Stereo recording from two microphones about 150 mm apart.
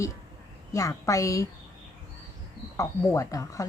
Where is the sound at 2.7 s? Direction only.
20° left (ahead or behind).